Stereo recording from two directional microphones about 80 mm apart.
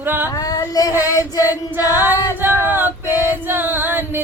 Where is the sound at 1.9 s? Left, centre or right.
Right.